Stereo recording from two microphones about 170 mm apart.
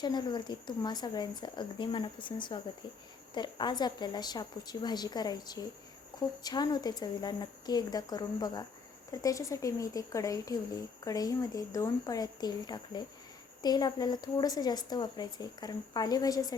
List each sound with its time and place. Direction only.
0.0 s a woman's voice: 25° left (ahead or behind)